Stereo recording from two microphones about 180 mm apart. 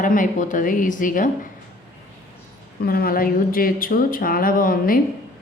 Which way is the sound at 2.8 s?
55° left (ahead or behind).